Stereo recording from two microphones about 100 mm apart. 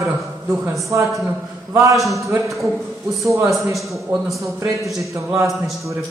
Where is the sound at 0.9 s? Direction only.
30° right (ahead or behind).